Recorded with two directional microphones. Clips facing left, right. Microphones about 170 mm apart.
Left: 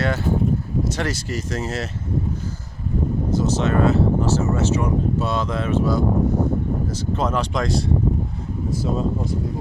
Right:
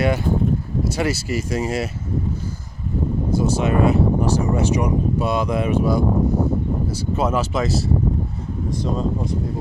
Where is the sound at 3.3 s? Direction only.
10° right (ahead or behind).